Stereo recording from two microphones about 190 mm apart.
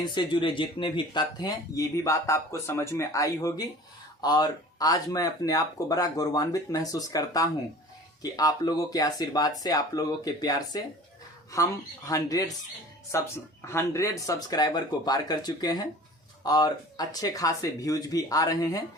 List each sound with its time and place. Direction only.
0.0 s speech: 25° left (ahead or behind)